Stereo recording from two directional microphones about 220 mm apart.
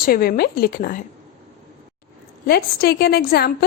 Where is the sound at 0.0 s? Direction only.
45° left (ahead or behind).